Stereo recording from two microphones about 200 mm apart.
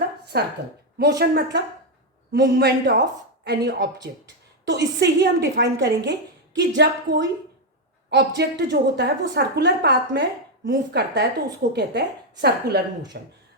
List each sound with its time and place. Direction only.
0.3 s a woman's voice: 55° right (ahead or behind)